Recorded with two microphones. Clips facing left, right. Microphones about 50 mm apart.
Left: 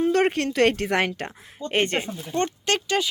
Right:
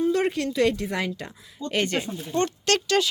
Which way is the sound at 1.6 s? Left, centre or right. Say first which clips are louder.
Left 2 dB; left.